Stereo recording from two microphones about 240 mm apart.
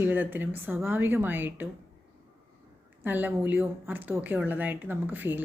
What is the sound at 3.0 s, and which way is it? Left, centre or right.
A woman's voice, centre.